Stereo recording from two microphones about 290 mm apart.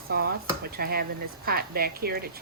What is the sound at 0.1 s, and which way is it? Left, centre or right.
Speech, right.